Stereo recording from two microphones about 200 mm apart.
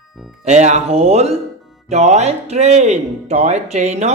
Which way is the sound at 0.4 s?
35° right (ahead or behind).